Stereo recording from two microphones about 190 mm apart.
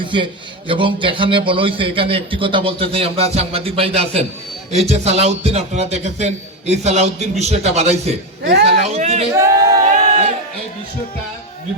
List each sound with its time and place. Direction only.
0.0 s a man's voice: 25° right (ahead or behind)
8.4 s speech: 55° right (ahead or behind)
8.9 s a man's voice: 35° right (ahead or behind)
9.8 s crowd: 35° right (ahead or behind)